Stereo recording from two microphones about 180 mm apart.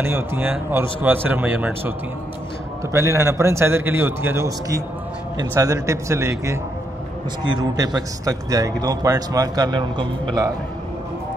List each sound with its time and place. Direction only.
0.0 s a man's voice: 10° right (ahead or behind)
7.7 s a man's voice: 20° right (ahead or behind)